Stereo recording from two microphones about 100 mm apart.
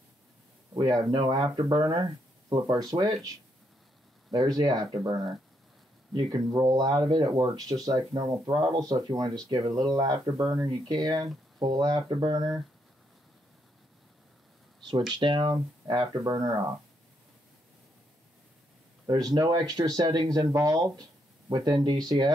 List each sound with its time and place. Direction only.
0.7 s speech: 40° right (ahead or behind)
4.3 s speech: 40° right (ahead or behind)
15.1 s speech: 50° right (ahead or behind)
16.3 s speech: 35° right (ahead or behind)
19.0 s speech: 40° right (ahead or behind)